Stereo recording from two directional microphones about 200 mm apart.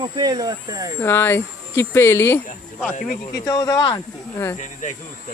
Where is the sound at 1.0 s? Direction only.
10° left (ahead or behind).